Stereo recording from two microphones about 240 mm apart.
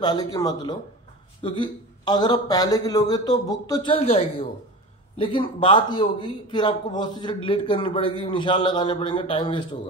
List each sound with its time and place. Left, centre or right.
0.0 s a man's voice: centre